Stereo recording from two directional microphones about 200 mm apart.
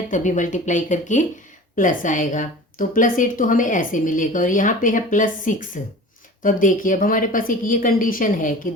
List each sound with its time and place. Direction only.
0.1 s a woman's voice: 40° left (ahead or behind)